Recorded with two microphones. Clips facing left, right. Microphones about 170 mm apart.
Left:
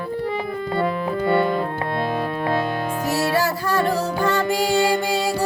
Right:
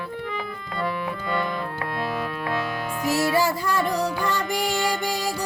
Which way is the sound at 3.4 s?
15° right (ahead or behind).